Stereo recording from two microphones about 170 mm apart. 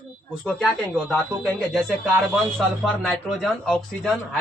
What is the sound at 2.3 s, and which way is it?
A man's voice, centre (ahead or behind).